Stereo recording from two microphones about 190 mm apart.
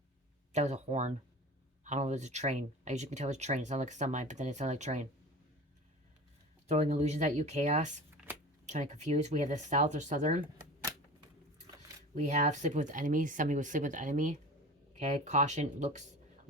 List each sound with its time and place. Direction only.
0.5 s speech: 35° right (ahead or behind)
6.7 s speech: 35° right (ahead or behind)
12.1 s speech: 40° right (ahead or behind)